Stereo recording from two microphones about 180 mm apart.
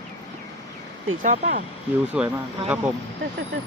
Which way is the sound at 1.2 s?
45° right (ahead or behind).